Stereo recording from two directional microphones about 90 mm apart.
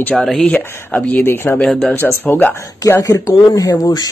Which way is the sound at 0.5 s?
20° left (ahead or behind).